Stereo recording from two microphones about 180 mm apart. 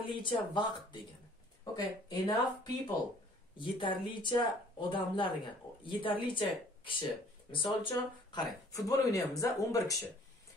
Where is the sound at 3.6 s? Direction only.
30° left (ahead or behind).